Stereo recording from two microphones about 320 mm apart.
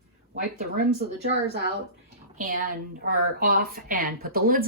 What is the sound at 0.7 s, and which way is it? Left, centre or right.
Speech, right.